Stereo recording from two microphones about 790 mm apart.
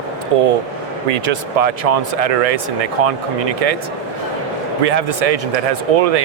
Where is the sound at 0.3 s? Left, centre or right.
Right.